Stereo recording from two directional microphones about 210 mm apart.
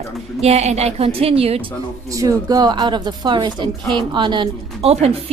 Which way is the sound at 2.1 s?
15° right (ahead or behind).